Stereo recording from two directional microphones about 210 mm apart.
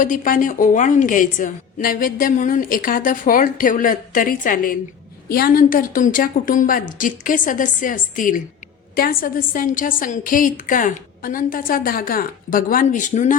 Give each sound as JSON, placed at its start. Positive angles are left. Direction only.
{"t": 0.0, "sound": "a woman's voice", "side_deg": 40}